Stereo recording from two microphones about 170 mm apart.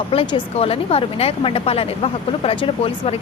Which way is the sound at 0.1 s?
30° left (ahead or behind).